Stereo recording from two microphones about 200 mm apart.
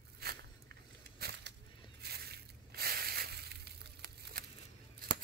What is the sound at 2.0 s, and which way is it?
Crushing, 55° right (ahead or behind).